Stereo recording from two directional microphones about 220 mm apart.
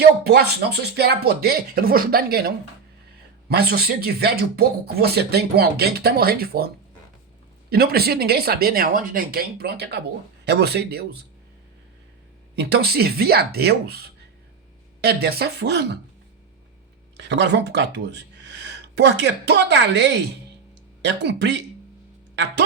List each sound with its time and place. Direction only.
0.3 s speech: 45° right (ahead or behind)
3.5 s speech: 45° right (ahead or behind)
7.7 s speech: 45° right (ahead or behind)
12.5 s speech: 45° right (ahead or behind)
17.2 s speech: 50° right (ahead or behind)